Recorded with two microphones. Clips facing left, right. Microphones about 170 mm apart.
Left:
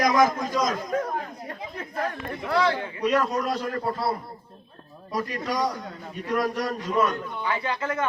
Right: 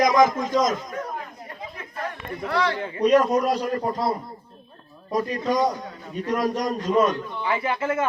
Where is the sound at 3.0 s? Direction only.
20° right (ahead or behind).